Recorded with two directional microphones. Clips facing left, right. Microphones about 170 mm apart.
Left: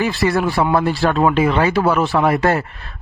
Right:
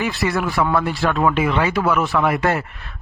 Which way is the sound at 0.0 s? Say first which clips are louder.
Left 4 dB; 30° left (ahead or behind).